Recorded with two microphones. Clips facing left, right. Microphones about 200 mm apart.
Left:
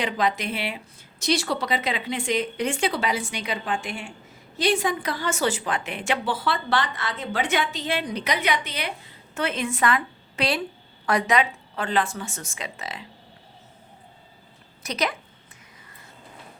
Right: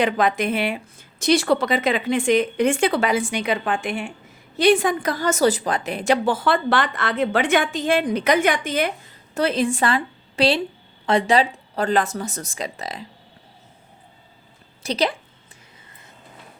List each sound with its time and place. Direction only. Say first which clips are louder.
0.0 s a woman's voice: right 5 dB; 55° right (ahead or behind)
9.3 s a woman's voice: right 7 dB; 35° right (ahead or behind)
14.8 s speech: right 5 dB; 30° right (ahead or behind)